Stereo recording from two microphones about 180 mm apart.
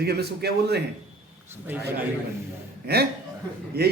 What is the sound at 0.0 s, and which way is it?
Speech, 60° right (ahead or behind).